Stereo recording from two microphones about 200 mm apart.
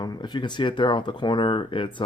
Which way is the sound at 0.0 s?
20° left (ahead or behind).